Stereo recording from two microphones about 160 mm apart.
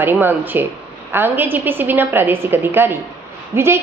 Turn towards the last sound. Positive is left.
turn(degrees=-15)  # may be behind; listen again after turning